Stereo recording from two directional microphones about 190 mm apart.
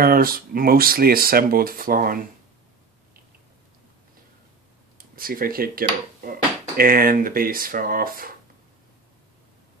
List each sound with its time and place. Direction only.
0.0 s speech: 50° right (ahead or behind)
4.9 s speech: 50° right (ahead or behind)